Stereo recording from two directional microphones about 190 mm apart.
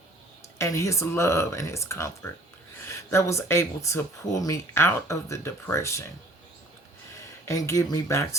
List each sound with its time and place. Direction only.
0.6 s speech: 15° left (ahead or behind)
7.4 s speech: 15° left (ahead or behind)